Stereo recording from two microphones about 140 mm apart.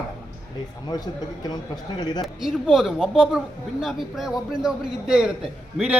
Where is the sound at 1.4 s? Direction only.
30° left (ahead or behind).